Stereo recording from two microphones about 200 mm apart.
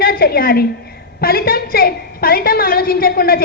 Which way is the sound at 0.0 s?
50° left (ahead or behind).